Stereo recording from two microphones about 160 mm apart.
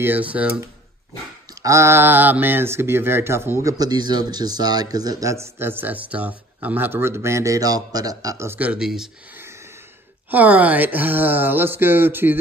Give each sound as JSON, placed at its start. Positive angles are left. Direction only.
{"t": 0.0, "sound": "speech", "side_deg": -10}
{"t": 10.3, "sound": "speech", "side_deg": -10}